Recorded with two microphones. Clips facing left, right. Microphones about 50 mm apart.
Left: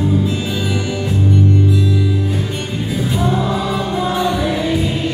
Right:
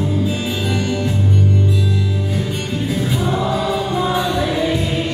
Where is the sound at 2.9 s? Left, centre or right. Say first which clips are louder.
Left 3 dB; centre.